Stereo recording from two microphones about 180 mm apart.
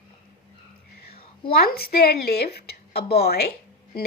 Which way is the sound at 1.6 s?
60° left (ahead or behind).